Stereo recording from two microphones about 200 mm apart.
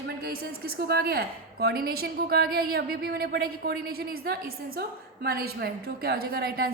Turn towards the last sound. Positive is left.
turn(degrees=-50)  # may be behind; listen again after turning